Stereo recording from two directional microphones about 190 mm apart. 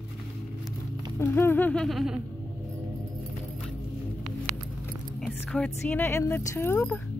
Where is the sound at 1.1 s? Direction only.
10° left (ahead or behind).